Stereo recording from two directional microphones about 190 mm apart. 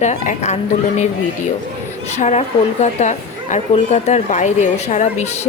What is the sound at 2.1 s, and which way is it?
A woman's voice, 35° left (ahead or behind).